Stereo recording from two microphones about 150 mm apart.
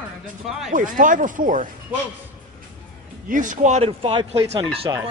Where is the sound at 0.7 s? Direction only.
60° right (ahead or behind).